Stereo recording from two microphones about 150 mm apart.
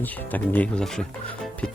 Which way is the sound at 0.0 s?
10° left (ahead or behind).